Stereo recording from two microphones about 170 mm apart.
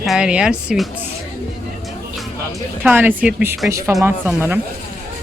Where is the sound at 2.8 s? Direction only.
10° right (ahead or behind).